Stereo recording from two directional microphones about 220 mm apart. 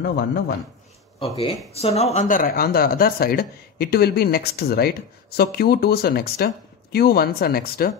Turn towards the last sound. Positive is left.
turn(degrees=45)  # may be behind; listen again after turning